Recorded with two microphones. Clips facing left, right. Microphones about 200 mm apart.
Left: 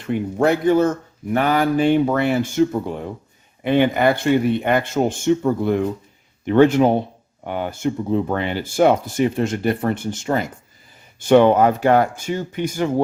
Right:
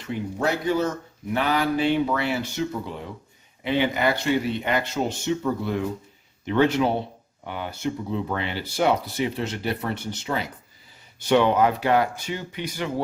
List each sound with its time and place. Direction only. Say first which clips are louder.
0.0 s speech: left 7 dB; 55° left (ahead or behind)